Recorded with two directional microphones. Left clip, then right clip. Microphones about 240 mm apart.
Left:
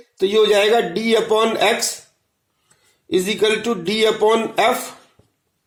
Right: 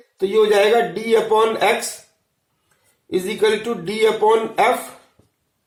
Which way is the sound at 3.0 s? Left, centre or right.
Left.